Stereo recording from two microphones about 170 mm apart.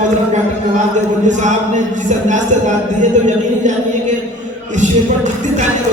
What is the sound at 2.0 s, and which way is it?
Speech, 45° right (ahead or behind).